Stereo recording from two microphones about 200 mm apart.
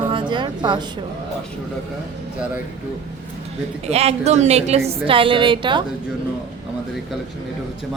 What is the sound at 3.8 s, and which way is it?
A woman's voice, 30° right (ahead or behind).